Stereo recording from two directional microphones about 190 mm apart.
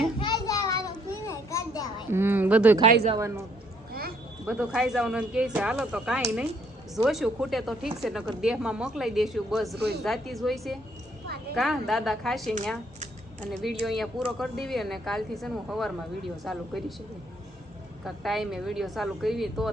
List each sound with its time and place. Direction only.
0.2 s a sound: 20° left (ahead or behind)
1.1 s children playing: 15° left (ahead or behind)
2.1 s a man's voice: 10° right (ahead or behind)
4.4 s speech: 5° right (ahead or behind)
9.7 s speech: 60° right (ahead or behind)
10.0 s speech: centre (ahead or behind)
18.0 s speech: centre (ahead or behind)